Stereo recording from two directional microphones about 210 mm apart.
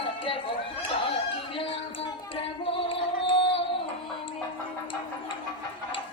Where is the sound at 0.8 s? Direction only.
25° left (ahead or behind).